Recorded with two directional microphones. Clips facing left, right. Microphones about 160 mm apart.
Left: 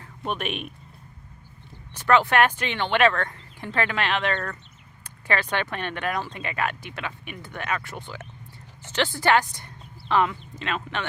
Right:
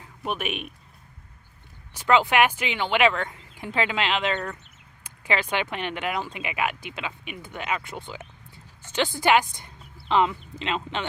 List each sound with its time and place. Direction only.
0.3 s speech: 5° right (ahead or behind)
1.9 s speech: 15° right (ahead or behind)
9.6 s a sound: 20° right (ahead or behind)
10.6 s speech: 20° right (ahead or behind)